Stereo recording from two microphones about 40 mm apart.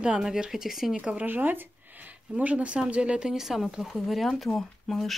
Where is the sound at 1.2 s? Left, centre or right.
Right.